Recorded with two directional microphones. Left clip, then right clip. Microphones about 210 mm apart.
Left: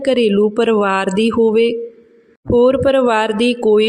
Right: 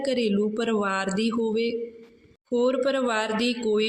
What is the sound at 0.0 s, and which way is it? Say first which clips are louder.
Speech: left 11 dB; 40° left (ahead or behind).